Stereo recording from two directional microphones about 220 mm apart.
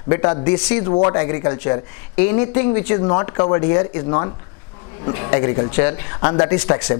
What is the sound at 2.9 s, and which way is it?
Speech, 20° left (ahead or behind).